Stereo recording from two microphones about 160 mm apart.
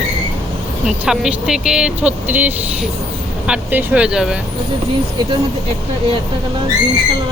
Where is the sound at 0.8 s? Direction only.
5° right (ahead or behind).